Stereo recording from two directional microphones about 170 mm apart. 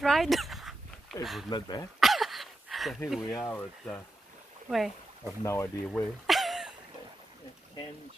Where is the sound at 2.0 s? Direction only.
Centre (ahead or behind).